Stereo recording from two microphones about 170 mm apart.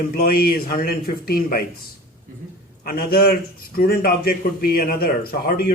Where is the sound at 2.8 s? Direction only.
60° left (ahead or behind).